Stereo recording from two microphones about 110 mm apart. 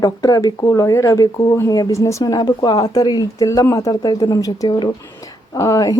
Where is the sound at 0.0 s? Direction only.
35° left (ahead or behind).